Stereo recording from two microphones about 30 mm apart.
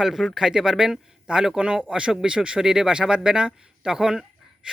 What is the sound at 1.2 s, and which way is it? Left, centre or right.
Speech, right.